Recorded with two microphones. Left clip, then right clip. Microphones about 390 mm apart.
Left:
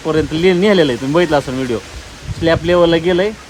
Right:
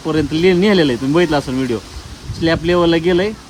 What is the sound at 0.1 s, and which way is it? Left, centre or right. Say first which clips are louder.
Speech: left 1 dB; centre.